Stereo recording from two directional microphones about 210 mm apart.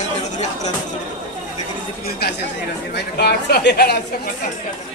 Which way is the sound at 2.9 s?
50° left (ahead or behind).